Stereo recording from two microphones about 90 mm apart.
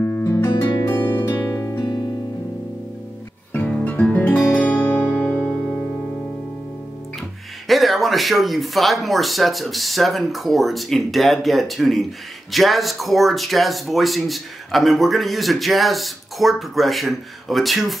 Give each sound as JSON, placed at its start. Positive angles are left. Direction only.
{"t": 0.0, "sound": "music", "side_deg": 25}
{"t": 1.5, "sound": "music", "side_deg": 35}
{"t": 1.8, "sound": "music", "side_deg": 50}
{"t": 3.5, "sound": "music", "side_deg": 15}
{"t": 7.6, "sound": "speech", "side_deg": 0}